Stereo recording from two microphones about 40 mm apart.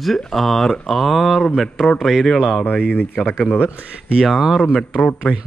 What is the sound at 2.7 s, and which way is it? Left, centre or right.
Speech, left.